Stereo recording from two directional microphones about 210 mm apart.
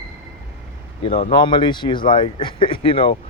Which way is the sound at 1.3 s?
20° left (ahead or behind).